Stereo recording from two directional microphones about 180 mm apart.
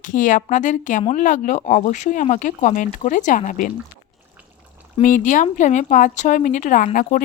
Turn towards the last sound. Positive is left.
turn(degrees=50)  # may be behind; listen again after turning